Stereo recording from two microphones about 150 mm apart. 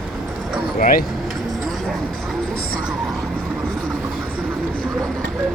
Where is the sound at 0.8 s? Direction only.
70° left (ahead or behind).